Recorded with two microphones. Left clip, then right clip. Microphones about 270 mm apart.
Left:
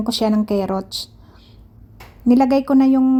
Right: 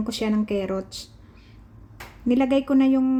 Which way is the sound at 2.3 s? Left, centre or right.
Left.